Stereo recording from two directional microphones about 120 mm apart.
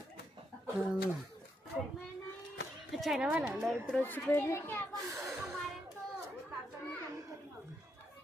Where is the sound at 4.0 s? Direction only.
15° left (ahead or behind).